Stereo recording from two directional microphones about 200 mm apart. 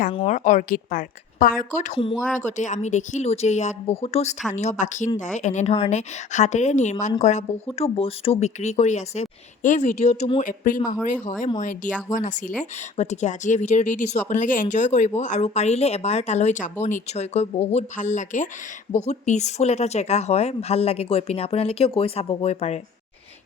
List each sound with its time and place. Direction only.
0.3 s speech: 40° left (ahead or behind)
2.0 s speech: 25° left (ahead or behind)
2.3 s speech: 35° left (ahead or behind)
10.4 s speech: 40° left (ahead or behind)